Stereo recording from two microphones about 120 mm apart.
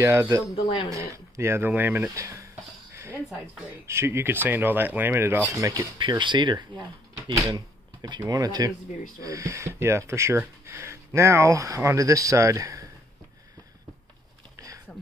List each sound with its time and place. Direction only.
0.0 s speech: 25° right (ahead or behind)
0.6 s speech: 50° left (ahead or behind)
0.8 s speech: 25° right (ahead or behind)
2.9 s a sound: 20° right (ahead or behind)
3.8 s speech: 20° right (ahead or behind)
5.5 s speech: 25° right (ahead or behind)
5.9 s speech: 40° right (ahead or behind)
7.5 s a sound: 35° right (ahead or behind)
8.3 s speech: 30° right (ahead or behind)